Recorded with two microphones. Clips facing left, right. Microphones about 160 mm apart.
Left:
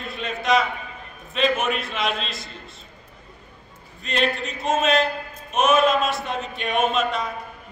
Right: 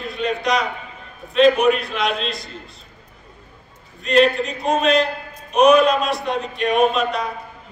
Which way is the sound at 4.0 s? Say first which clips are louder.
Right 9 dB; centre (ahead or behind).